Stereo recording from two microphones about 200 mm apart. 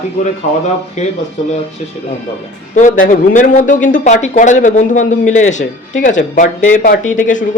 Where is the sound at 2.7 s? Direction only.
40° left (ahead or behind).